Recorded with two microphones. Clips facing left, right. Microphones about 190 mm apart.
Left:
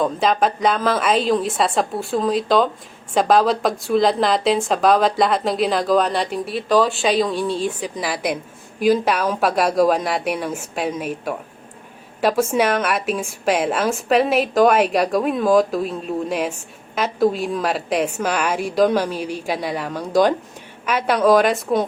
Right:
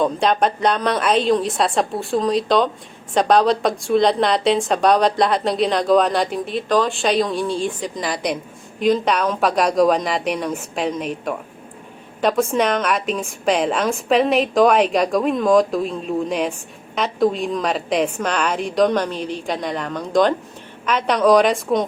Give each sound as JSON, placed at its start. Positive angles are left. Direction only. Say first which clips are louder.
{"t": 0.0, "sound": "a woman's voice", "louder": "right 1 dB", "side_deg": 0}